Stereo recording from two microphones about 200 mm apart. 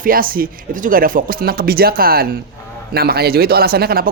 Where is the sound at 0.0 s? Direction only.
45° right (ahead or behind).